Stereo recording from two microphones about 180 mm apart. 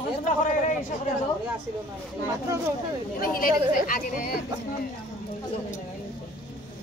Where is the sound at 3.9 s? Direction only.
55° left (ahead or behind).